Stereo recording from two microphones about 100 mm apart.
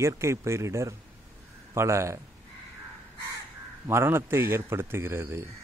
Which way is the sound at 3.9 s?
25° right (ahead or behind).